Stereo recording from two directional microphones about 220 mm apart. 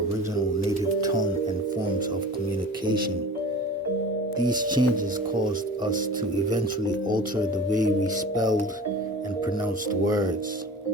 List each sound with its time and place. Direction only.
4.4 s speech: 20° right (ahead or behind)